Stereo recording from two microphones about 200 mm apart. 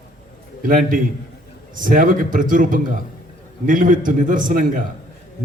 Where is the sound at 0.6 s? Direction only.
45° right (ahead or behind).